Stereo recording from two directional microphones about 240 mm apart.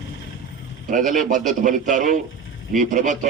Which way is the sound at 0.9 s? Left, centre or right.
Right.